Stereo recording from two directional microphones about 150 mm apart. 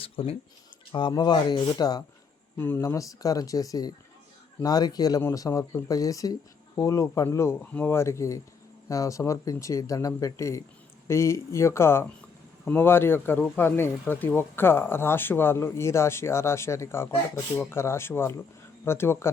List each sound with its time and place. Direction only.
0.0 s speech: 40° left (ahead or behind)
2.6 s speech: 15° left (ahead or behind)